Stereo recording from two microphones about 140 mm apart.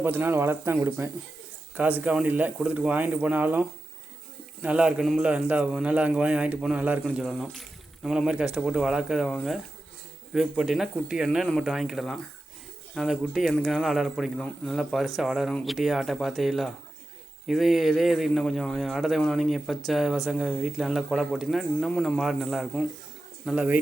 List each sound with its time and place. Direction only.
0.0 s a man's voice: 15° right (ahead or behind); by 22.9 s 5° left (ahead or behind)
23.5 s a man's voice: 10° right (ahead or behind)